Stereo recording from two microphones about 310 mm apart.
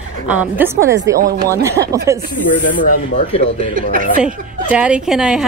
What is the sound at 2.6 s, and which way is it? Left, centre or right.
Speech, left.